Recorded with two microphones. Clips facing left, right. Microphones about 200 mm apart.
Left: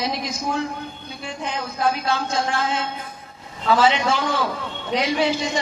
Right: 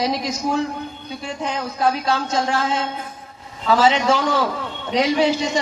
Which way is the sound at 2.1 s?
40° right (ahead or behind).